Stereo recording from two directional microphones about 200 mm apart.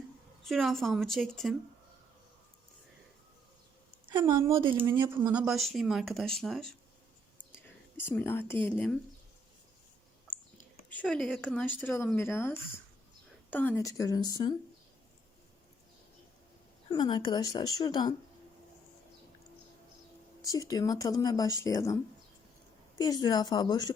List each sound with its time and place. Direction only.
0.4 s speech: centre (ahead or behind)
4.0 s a sound: 25° right (ahead or behind)
4.3 s speech: 15° right (ahead or behind); by 6.7 s centre (ahead or behind)
7.9 s speech: 10° left (ahead or behind)
10.8 s speech: 5° left (ahead or behind)
16.9 s a woman's voice: 20° left (ahead or behind)
20.4 s speech: 15° left (ahead or behind)
23.0 s a woman's voice: 20° left (ahead or behind)